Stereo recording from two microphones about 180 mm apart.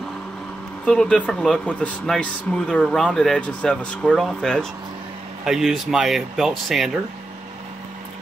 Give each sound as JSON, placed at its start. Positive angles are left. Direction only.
{"t": 0.8, "sound": "speech", "side_deg": 5}